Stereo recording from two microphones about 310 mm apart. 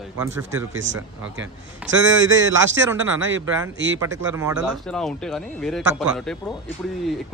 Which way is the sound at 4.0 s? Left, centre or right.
Centre.